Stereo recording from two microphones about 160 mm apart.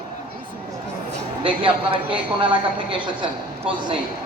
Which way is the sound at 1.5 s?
30° right (ahead or behind).